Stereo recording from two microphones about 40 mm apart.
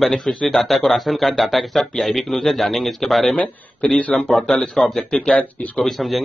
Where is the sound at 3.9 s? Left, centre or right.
Left.